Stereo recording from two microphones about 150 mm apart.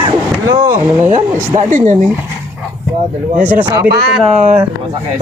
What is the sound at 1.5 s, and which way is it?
Speech, 55° right (ahead or behind).